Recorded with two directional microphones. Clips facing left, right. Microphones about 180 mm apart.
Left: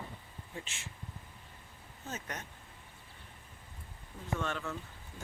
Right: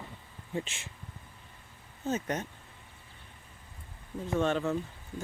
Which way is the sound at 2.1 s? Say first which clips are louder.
Right 11 dB; 25° right (ahead or behind).